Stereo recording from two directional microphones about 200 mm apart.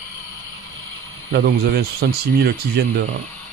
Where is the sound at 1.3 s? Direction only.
50° right (ahead or behind).